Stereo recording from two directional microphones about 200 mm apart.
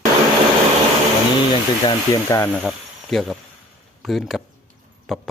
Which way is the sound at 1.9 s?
15° left (ahead or behind).